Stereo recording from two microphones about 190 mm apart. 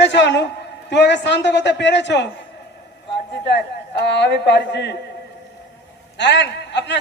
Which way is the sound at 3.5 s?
60° left (ahead or behind).